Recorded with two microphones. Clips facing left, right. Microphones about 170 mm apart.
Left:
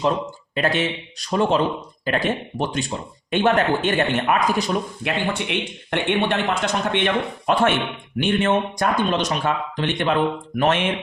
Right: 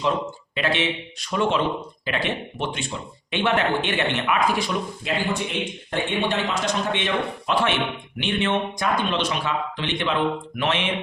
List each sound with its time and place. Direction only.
0.5 s speech: 45° left (ahead or behind)
5.0 s a man's voice: 70° left (ahead or behind); by 10.8 s 45° left (ahead or behind)